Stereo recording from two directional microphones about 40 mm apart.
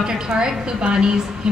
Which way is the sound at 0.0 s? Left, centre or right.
Centre.